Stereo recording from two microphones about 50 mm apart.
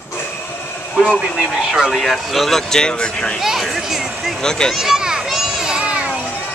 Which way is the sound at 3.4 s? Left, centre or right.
Centre.